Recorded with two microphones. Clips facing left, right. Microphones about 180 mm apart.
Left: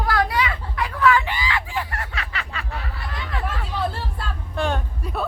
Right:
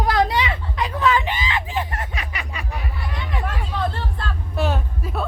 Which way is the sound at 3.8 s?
10° left (ahead or behind).